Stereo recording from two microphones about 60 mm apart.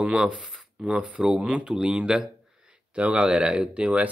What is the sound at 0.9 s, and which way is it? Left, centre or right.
Speech, right.